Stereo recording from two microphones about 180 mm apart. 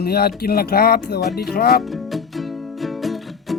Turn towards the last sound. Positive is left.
turn(degrees=0)  # may be behind; listen again after turning